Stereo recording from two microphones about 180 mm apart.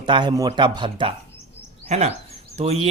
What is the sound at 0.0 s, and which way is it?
Speech, 25° right (ahead or behind).